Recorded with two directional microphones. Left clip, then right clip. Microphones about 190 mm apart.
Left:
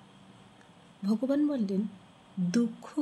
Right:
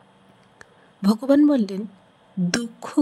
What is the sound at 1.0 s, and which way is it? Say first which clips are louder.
Speech: right 11 dB; 55° right (ahead or behind).